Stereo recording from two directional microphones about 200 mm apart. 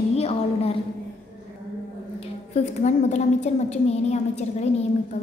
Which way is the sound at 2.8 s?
35° left (ahead or behind).